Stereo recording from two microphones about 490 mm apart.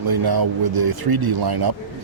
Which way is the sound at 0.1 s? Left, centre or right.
Right.